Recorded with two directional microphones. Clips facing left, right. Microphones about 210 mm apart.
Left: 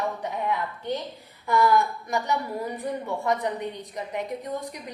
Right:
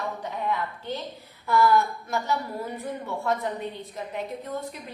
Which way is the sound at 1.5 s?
15° left (ahead or behind).